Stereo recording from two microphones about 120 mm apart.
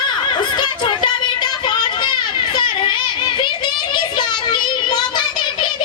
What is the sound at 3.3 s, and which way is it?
Child singing, 40° left (ahead or behind).